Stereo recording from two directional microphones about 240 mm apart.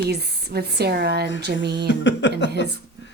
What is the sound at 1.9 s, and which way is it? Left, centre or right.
Speech, left.